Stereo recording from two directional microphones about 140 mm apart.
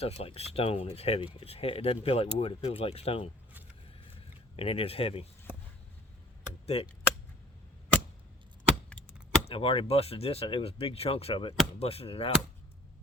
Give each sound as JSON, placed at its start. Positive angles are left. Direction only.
{"t": 0.0, "sound": "speech", "side_deg": 45}
{"t": 4.5, "sound": "speech", "side_deg": 45}
{"t": 6.7, "sound": "speech", "side_deg": 45}
{"t": 9.5, "sound": "speech", "side_deg": 40}